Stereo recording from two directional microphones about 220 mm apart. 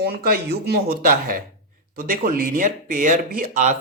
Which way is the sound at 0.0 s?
45° right (ahead or behind).